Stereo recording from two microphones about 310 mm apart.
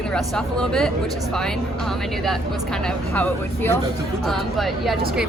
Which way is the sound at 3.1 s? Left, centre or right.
Centre.